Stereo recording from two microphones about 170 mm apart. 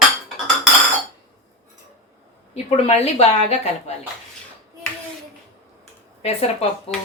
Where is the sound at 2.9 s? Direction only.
40° left (ahead or behind).